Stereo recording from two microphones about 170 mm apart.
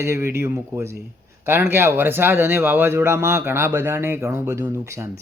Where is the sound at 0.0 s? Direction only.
15° right (ahead or behind).